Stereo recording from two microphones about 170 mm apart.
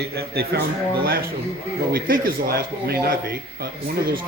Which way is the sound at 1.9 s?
60° right (ahead or behind).